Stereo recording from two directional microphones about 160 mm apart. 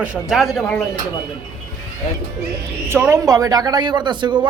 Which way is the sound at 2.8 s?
15° right (ahead or behind).